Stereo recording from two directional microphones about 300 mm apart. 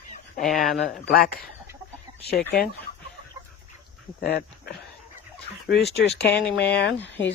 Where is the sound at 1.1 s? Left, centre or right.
Left.